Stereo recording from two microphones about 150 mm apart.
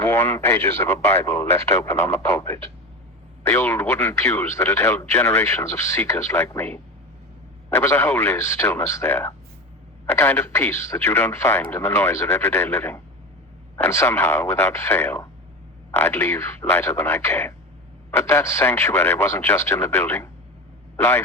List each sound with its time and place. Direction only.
0.0 s speech: 15° left (ahead or behind)
2.0 s speech: 45° left (ahead or behind)
2.2 s speech: 20° left (ahead or behind)